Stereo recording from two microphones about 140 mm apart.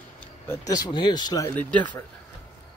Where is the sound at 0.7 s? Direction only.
30° left (ahead or behind).